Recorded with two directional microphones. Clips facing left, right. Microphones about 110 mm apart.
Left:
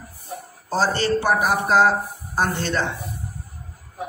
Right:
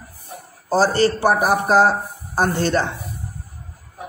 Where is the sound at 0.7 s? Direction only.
40° right (ahead or behind).